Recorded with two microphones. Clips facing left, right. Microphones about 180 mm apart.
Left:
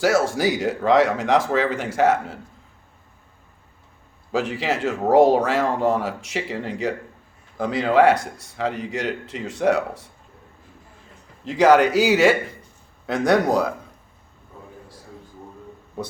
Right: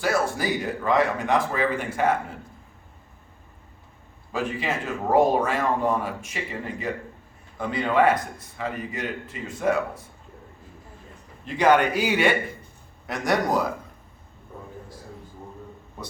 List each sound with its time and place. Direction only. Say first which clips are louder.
0.0 s a man's voice: left 5 dB; 90° left
4.3 s a man's voice: left 4 dB; 80° left
11.4 s a man's voice: left 4 dB; 90° left
13.1 s a man's voice: left 5 dB; 65° left (ahead or behind)